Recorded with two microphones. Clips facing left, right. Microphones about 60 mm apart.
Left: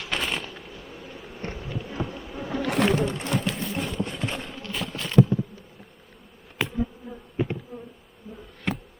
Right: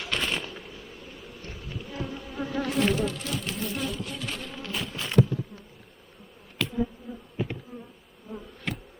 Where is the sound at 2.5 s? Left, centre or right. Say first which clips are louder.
Left 3 dB; left.